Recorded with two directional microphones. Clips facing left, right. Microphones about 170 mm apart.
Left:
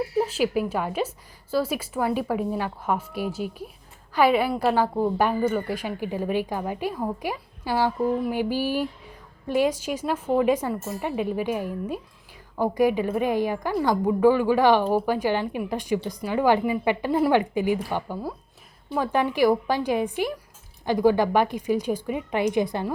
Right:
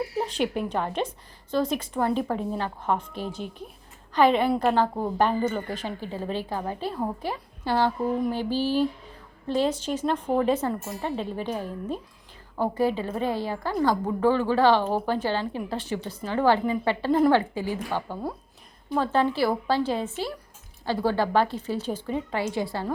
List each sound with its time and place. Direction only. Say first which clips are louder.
0.2 s a woman's voice: left 4 dB; 5° left (ahead or behind)